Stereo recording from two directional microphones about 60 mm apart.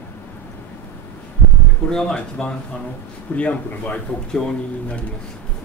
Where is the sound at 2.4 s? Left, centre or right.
Centre.